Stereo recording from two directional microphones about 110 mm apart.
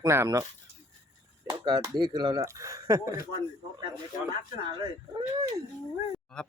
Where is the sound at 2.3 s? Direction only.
30° right (ahead or behind).